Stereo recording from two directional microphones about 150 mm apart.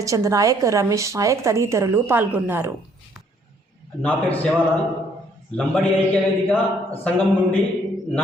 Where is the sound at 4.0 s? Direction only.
10° left (ahead or behind).